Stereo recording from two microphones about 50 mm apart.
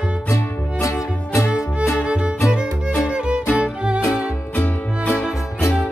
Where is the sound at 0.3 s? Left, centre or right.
Left.